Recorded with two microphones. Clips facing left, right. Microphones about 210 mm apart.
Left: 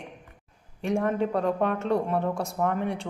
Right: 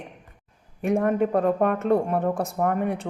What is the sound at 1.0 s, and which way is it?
Mantra, 50° right (ahead or behind).